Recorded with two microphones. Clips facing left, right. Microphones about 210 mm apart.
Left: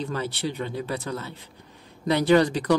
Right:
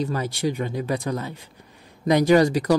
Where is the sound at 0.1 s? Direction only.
10° right (ahead or behind).